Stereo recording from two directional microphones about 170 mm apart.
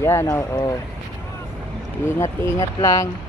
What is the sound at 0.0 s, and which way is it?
Speech, 15° left (ahead or behind).